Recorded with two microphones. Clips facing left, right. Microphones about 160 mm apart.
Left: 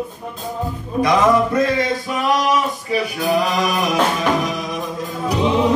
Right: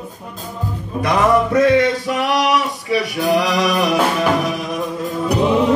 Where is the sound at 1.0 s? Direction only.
65° right (ahead or behind).